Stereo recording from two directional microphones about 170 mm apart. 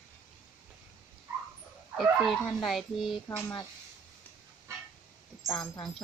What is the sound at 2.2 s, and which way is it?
Speech, centre (ahead or behind).